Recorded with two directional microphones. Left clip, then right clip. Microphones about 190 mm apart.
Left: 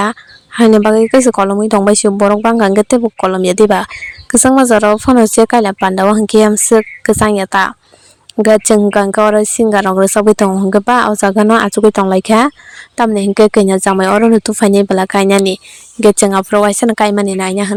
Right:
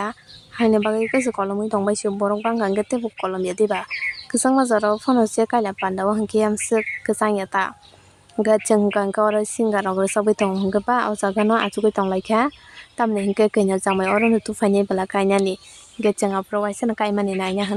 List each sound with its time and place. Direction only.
0.0 s a woman's voice: 50° left (ahead or behind)